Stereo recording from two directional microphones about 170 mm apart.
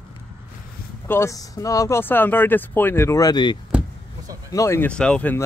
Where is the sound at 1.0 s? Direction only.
15° left (ahead or behind).